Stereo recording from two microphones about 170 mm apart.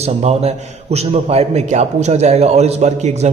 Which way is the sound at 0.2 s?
40° right (ahead or behind).